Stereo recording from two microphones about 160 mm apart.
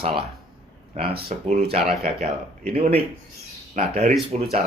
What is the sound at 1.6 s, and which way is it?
Speech, 40° right (ahead or behind).